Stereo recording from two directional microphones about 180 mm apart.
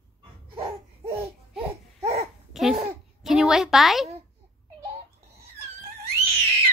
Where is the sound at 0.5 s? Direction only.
30° right (ahead or behind).